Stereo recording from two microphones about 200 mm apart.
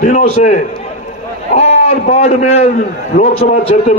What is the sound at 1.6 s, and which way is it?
A man's voice, 30° left (ahead or behind).